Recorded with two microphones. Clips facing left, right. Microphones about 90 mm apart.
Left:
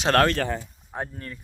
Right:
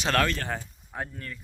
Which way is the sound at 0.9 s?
30° left (ahead or behind).